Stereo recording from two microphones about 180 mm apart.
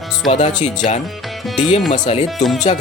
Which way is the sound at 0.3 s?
40° left (ahead or behind).